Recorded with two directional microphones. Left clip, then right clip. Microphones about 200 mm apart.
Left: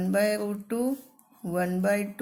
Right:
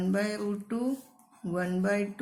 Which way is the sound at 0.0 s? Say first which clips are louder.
Left 6 dB; 35° left (ahead or behind).